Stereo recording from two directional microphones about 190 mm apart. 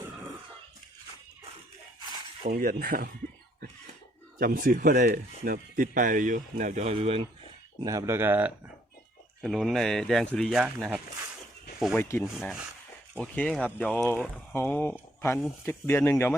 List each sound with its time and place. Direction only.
2.5 s speech: 50° right (ahead or behind)
4.4 s speech: 50° right (ahead or behind); by 7.3 s 30° right (ahead or behind)
7.8 s speech: 15° right (ahead or behind); by 11.0 s centre (ahead or behind)
11.9 s speech: 10° left (ahead or behind)
12.2 s speech: 5° right (ahead or behind)
13.1 s speech: 10° left (ahead or behind)